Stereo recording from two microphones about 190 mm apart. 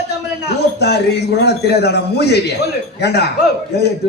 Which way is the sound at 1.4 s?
60° left (ahead or behind).